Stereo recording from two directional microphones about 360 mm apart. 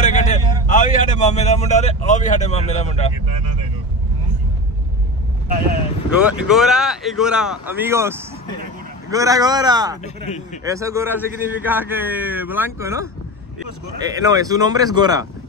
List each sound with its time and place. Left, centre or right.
0.0 s a man's voice: centre
6.2 s a man's voice: centre
10.0 s speech: centre
10.6 s a man's voice: centre